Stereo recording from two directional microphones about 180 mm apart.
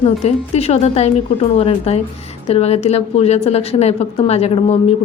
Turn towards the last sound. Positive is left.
turn(degrees=35)  # may be behind; listen again after turning